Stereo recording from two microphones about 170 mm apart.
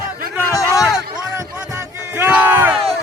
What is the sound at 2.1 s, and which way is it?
Battle cry, 10° right (ahead or behind).